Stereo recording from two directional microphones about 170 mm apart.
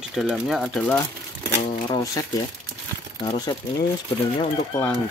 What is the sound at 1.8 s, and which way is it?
Speech, 20° left (ahead or behind).